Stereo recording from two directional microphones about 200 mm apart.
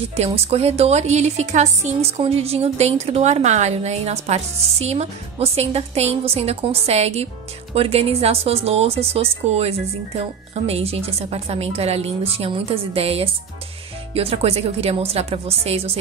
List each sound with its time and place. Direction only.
0.1 s a woman's voice: 30° right (ahead or behind)